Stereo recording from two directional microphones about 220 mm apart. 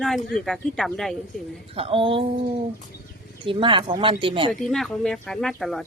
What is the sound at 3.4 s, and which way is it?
Speech, 25° right (ahead or behind).